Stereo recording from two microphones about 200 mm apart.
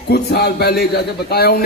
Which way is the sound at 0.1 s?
55° left (ahead or behind).